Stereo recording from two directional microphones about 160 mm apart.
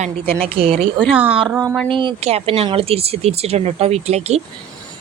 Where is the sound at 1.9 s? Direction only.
30° right (ahead or behind).